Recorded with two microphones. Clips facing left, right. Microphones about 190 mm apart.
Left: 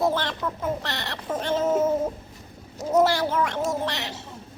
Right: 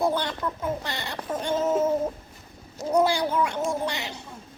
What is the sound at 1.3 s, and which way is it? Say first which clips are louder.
Cat: left 1 dB; 5° left (ahead or behind).